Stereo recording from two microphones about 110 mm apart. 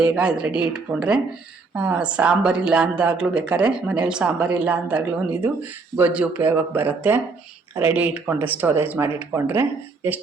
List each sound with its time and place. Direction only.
0.0 s speech: 10° right (ahead or behind)